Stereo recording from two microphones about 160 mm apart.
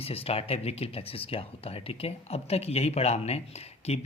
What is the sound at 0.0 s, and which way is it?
Speech, 35° left (ahead or behind).